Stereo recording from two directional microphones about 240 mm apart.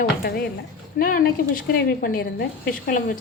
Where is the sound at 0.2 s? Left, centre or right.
Left.